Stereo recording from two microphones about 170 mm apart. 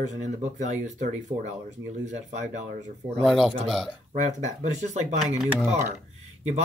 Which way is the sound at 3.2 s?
Centre (ahead or behind).